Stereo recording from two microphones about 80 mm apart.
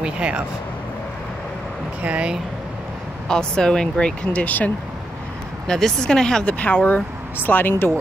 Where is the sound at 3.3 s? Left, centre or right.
Centre.